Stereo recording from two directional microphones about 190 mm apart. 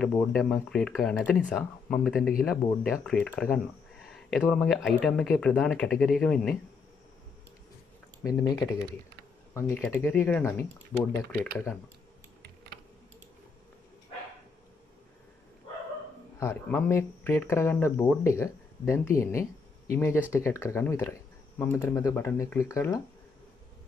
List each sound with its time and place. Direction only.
0.3 s speech: centre (ahead or behind)
8.2 s speech: 20° left (ahead or behind)
16.3 s speech: 10° left (ahead or behind)